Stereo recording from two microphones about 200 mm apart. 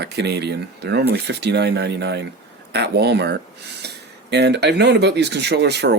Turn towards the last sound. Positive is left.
turn(degrees=-55)  # may be behind; listen again after turning